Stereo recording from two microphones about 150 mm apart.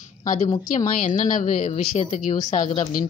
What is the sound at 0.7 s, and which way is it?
Speech, 55° left (ahead or behind).